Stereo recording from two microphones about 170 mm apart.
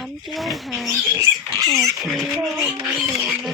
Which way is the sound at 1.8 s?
Centre (ahead or behind).